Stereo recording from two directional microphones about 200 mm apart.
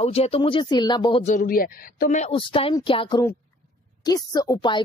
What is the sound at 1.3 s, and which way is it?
A woman's voice, 45° left (ahead or behind).